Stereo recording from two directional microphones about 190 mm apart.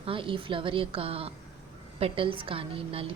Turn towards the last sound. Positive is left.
turn(degrees=-30)  # may be behind; listen again after turning